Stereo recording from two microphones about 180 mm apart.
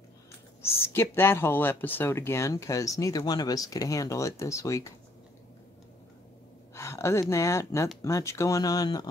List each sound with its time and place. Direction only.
0.6 s speech: 15° left (ahead or behind)
6.7 s speech: 15° left (ahead or behind)